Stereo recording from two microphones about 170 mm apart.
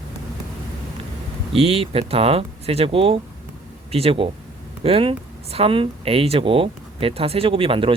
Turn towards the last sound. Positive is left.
turn(degrees=-30)  # may be behind; listen again after turning